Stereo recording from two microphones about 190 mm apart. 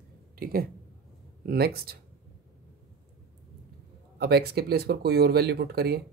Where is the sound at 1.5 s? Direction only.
55° right (ahead or behind).